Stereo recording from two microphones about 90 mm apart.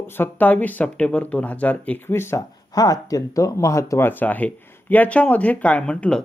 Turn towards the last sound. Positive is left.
turn(degrees=15)  # may be behind; listen again after turning